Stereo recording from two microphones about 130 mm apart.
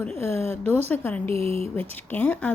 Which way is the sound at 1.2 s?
50° right (ahead or behind).